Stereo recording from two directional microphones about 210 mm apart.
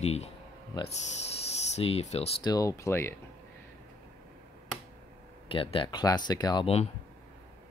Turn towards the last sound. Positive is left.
turn(degrees=25)  # may be behind; listen again after turning